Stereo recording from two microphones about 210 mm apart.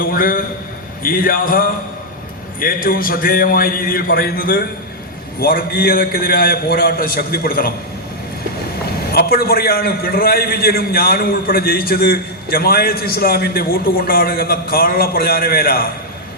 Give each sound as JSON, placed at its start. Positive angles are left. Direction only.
{"t": 0.0, "sound": "a man's voice", "side_deg": 45}
{"t": 9.1, "sound": "a man's voice", "side_deg": 45}